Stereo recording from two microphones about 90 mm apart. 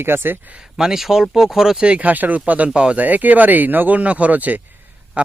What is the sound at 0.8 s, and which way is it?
Speech, 5° right (ahead or behind).